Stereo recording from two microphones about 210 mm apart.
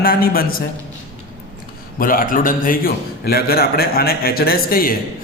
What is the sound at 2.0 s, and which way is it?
A man's voice, 40° left (ahead or behind).